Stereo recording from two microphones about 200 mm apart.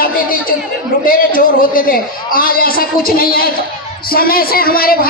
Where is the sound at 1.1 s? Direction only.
45° left (ahead or behind).